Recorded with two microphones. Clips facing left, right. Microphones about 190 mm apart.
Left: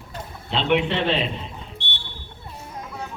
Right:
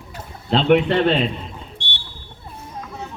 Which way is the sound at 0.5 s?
45° right (ahead or behind).